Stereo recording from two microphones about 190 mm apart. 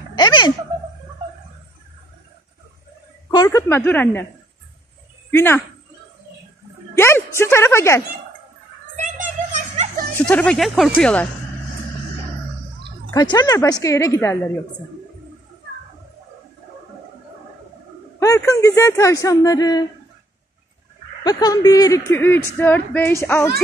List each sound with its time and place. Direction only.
0.1 s a sound: 25° left (ahead or behind)
3.3 s a woman's voice: 20° left (ahead or behind)
5.3 s speech: 10° left (ahead or behind)
7.0 s a woman's voice: 15° left (ahead or behind)
8.9 s music: 40° right (ahead or behind)
10.1 s speech: 5° left (ahead or behind)
13.1 s speech: 20° left (ahead or behind)
18.2 s speech: 15° left (ahead or behind)
21.2 s speech: 20° left (ahead or behind)